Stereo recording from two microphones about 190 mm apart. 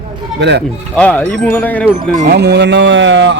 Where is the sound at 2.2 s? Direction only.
60° right (ahead or behind).